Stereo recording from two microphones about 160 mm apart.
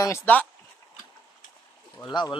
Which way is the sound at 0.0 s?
15° left (ahead or behind).